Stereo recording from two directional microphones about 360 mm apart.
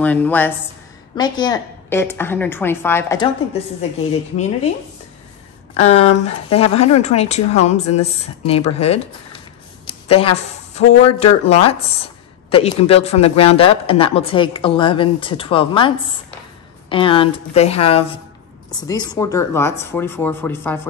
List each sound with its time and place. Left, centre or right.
0.0 s a woman's voice: centre
5.8 s speech: centre